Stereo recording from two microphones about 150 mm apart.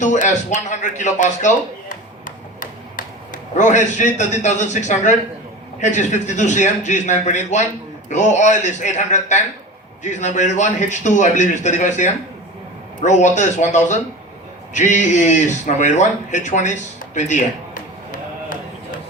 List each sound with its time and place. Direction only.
0.0 s a man's voice: 55° left (ahead or behind)